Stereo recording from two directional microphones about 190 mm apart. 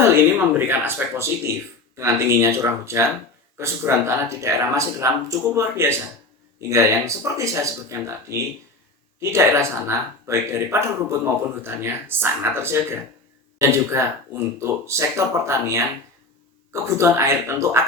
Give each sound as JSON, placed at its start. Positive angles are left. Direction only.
{"t": 0.0, "sound": "speech", "side_deg": -10}